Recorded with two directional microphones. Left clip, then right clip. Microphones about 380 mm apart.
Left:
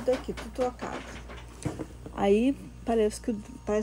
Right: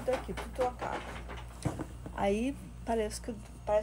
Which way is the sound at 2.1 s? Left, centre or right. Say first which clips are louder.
Left 7 dB; left.